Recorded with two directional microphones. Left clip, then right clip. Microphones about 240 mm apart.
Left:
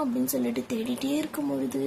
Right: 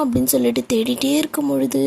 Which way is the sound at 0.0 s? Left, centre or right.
Right.